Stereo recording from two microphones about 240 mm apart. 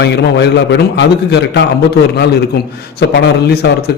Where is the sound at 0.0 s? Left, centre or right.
Left.